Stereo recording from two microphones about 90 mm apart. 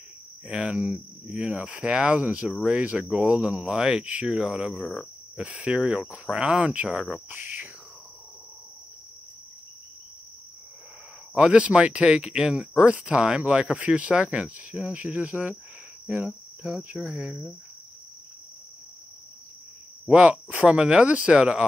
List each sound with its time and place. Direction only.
0.5 s speech: 10° right (ahead or behind)
4.7 s cricket: 5° left (ahead or behind)
5.4 s speech: 15° right (ahead or behind)
6.9 s cricket: 5° right (ahead or behind)
7.2 s speech: 20° right (ahead or behind)
11.3 s speech: 10° right (ahead or behind)
16.1 s cricket: 15° right (ahead or behind)
17.0 s speech: 10° right (ahead or behind)
20.1 s speech: 15° right (ahead or behind)